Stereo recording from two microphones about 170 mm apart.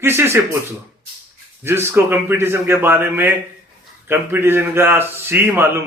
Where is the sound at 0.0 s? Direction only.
15° right (ahead or behind).